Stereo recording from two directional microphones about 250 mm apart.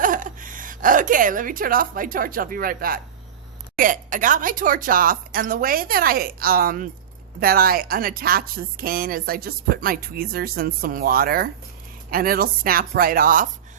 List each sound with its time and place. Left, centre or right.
0.0 s a woman's voice: right